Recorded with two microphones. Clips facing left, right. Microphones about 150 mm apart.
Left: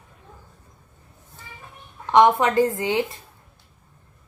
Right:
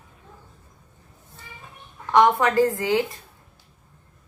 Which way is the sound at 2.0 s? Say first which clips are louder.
Left 2 dB; 20° left (ahead or behind).